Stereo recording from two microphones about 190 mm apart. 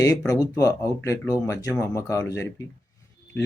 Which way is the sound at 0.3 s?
15° left (ahead or behind).